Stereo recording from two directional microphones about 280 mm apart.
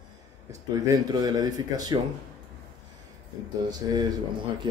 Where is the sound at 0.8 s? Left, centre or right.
Centre.